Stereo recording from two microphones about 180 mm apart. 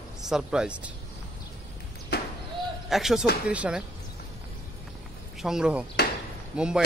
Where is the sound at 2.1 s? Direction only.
65° left (ahead or behind).